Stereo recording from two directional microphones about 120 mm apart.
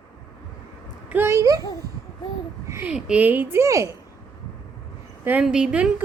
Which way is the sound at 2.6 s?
20° right (ahead or behind).